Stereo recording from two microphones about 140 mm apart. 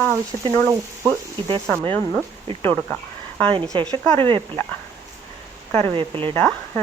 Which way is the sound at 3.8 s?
35° right (ahead or behind).